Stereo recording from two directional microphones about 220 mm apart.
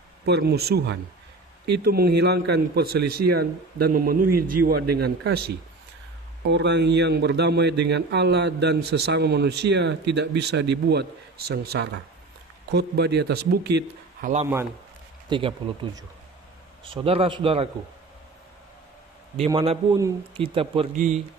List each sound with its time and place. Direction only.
0.2 s speech: 50° right (ahead or behind)
6.5 s speech: 50° right (ahead or behind)
15.2 s speech: 20° right (ahead or behind)
19.3 s speech: 25° right (ahead or behind)